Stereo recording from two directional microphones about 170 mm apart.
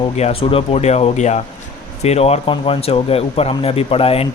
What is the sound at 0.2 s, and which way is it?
Speech, 35° left (ahead or behind).